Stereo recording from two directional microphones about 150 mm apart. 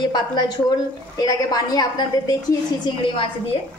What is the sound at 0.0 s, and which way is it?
A woman's voice, 30° left (ahead or behind).